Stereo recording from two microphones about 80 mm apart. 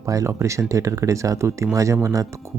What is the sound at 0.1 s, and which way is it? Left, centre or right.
Speech, right.